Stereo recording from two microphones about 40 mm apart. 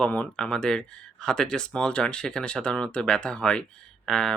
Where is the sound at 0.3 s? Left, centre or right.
Centre.